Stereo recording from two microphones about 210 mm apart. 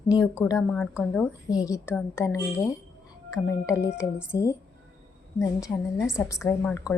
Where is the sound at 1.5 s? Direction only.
15° left (ahead or behind).